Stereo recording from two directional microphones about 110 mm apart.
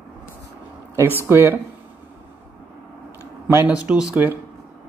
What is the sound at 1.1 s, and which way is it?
Speech, 20° right (ahead or behind).